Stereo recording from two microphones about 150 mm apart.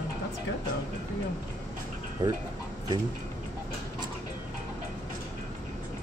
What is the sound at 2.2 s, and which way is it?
Speech, 30° right (ahead or behind).